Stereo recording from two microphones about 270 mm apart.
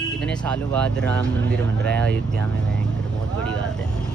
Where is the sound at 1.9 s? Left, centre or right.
Centre.